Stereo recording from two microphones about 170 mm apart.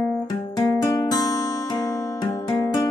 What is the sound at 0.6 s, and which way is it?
Music, 25° left (ahead or behind).